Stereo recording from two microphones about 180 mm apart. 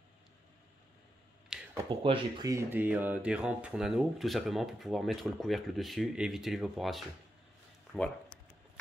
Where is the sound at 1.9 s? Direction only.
30° right (ahead or behind).